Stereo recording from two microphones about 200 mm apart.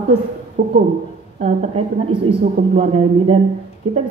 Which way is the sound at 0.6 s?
50° right (ahead or behind).